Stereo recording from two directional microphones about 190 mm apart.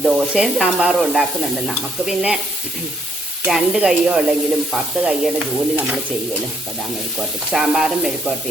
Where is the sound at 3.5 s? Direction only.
5° right (ahead or behind).